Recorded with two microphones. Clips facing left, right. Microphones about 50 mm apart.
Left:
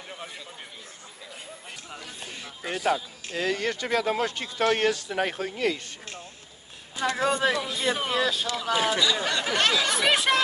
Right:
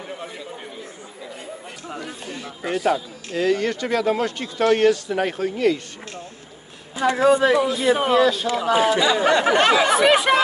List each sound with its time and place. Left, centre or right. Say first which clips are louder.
2.4 s a man's voice: right 5 dB; right
3.9 s speech: right 5 dB; right
4.4 s speech: right 6 dB; left
5.0 s speech: right 5 dB; right
7.0 s speech: right 8 dB; centre
8.6 s speech: right 7 dB; right